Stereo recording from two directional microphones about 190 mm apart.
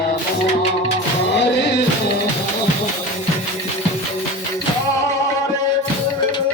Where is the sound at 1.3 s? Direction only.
65° left (ahead or behind).